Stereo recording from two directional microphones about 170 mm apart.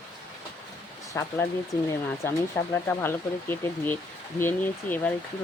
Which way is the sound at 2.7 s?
15° left (ahead or behind).